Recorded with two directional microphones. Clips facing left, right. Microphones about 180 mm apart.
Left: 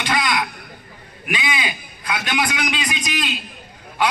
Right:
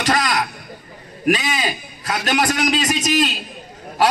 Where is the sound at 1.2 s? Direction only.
40° right (ahead or behind).